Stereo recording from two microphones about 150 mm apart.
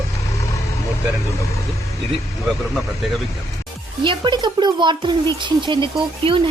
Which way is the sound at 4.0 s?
30° right (ahead or behind).